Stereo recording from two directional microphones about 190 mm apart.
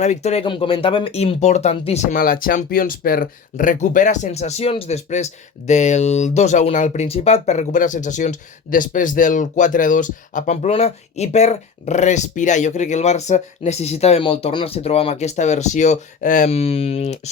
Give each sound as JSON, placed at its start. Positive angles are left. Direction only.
{"t": 0.0, "sound": "speech", "side_deg": 35}